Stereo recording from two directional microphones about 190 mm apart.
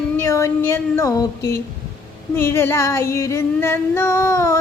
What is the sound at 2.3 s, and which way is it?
Female singing, 15° left (ahead or behind).